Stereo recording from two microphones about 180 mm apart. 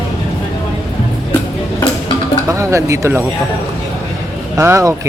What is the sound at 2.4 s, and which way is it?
Speech, 15° right (ahead or behind).